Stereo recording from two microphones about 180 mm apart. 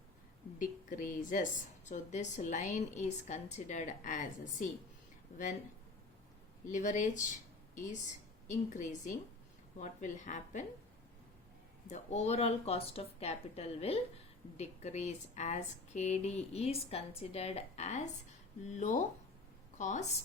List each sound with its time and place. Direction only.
0.6 s a woman's voice: 45° left (ahead or behind)
6.7 s a woman's voice: 45° left (ahead or behind)
8.4 s a woman's voice: 45° left (ahead or behind)
11.9 s a woman's voice: 40° left (ahead or behind)